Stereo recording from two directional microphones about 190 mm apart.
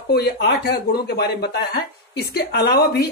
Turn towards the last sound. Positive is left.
turn(degrees=55)  # may be behind; listen again after turning